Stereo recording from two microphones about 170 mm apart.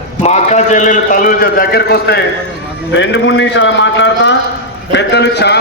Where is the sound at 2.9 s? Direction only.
90° left.